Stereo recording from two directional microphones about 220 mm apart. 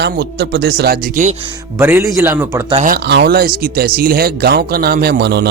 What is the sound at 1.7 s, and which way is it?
Speech, 10° right (ahead or behind).